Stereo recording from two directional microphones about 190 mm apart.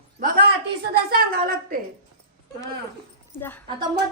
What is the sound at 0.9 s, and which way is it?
Speech, 55° right (ahead or behind).